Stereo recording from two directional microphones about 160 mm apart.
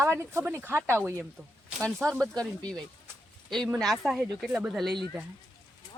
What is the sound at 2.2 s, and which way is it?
Speech, 5° left (ahead or behind).